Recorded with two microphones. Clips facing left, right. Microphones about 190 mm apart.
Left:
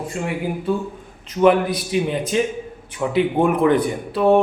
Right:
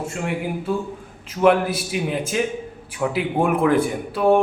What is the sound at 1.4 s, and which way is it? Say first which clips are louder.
A man's voice: left 2 dB; centre (ahead or behind).